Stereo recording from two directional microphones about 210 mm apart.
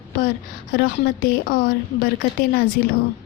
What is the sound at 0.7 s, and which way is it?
Speech, 50° left (ahead or behind).